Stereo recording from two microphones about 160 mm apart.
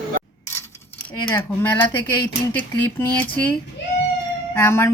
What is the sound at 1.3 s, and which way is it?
Speech, 15° left (ahead or behind).